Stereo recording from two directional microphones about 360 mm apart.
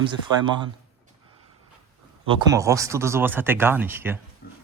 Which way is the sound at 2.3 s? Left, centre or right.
Centre.